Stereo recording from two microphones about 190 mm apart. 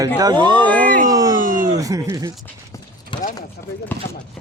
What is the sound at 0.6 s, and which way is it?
Speech, 5° left (ahead or behind).